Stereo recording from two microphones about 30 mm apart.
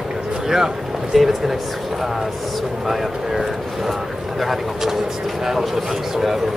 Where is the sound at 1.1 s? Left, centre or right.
Centre.